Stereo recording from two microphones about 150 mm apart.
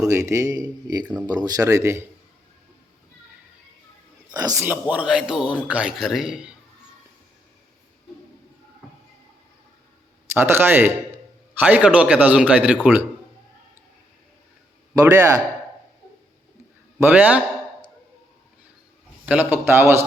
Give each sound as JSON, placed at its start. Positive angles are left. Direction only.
{"t": 0.1, "sound": "speech", "side_deg": -20}
{"t": 4.3, "sound": "speech", "side_deg": -25}
{"t": 4.6, "sound": "speech", "side_deg": -10}
{"t": 10.3, "sound": "a man's voice", "side_deg": -15}
{"t": 14.9, "sound": "speech", "side_deg": -15}
{"t": 17.0, "sound": "a man's voice", "side_deg": -10}
{"t": 19.2, "sound": "a man's voice", "side_deg": -10}